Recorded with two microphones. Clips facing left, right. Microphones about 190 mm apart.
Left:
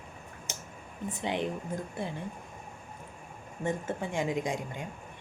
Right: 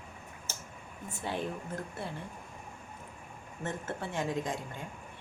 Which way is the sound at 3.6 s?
15° left (ahead or behind).